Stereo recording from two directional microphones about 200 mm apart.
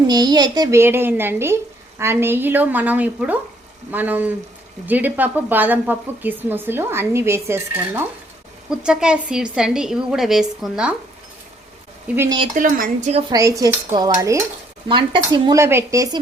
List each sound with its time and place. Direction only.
0.1 s a woman's voice: 20° right (ahead or behind); by 10.9 s 5° right (ahead or behind)
12.0 s a woman's voice: 10° right (ahead or behind)
12.5 s a woman's voice: 45° right (ahead or behind)
13.3 s a woman's voice: 15° right (ahead or behind)